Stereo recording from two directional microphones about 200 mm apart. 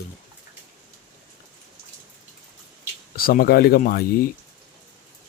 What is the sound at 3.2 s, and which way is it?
Speech, 45° left (ahead or behind).